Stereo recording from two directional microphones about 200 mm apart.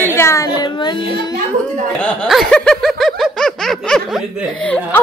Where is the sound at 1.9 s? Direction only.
5° left (ahead or behind).